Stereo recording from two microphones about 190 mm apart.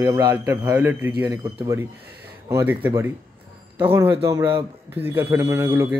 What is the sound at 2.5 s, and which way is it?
Speech, 10° right (ahead or behind).